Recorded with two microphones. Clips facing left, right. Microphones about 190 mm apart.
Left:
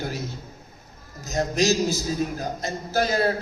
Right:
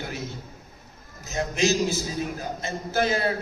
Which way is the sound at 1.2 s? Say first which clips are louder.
Left 2 dB; 40° left (ahead or behind).